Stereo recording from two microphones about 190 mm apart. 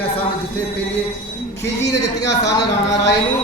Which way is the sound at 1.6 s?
15° left (ahead or behind).